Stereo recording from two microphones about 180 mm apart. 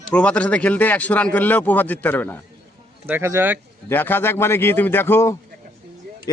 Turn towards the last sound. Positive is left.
turn(degrees=15)  # may be behind; listen again after turning